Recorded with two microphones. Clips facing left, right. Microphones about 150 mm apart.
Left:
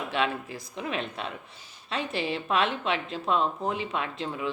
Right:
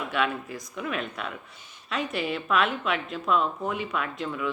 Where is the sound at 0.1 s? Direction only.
30° left (ahead or behind).